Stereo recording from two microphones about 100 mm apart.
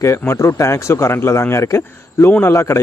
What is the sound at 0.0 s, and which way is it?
Speech, 30° left (ahead or behind).